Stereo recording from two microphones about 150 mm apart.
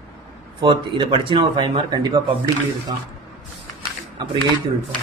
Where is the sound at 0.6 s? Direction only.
35° right (ahead or behind).